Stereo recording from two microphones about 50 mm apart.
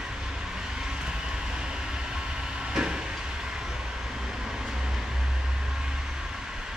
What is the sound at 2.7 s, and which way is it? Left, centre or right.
Train, centre.